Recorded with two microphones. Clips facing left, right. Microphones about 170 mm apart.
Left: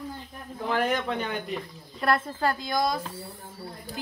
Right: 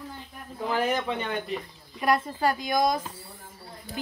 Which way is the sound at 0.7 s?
5° right (ahead or behind).